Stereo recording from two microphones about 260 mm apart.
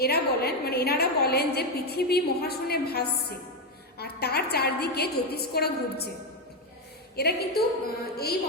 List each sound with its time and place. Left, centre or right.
0.0 s a woman's voice: left
7.2 s a woman's voice: left